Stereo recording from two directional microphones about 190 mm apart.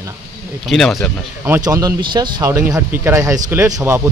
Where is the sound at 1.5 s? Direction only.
15° right (ahead or behind).